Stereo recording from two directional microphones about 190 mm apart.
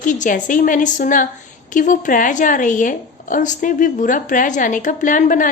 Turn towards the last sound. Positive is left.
turn(degrees=45)  # may be behind; listen again after turning